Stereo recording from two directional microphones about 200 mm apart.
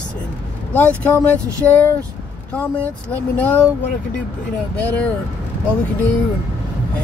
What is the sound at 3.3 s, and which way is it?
Speech, 10° left (ahead or behind).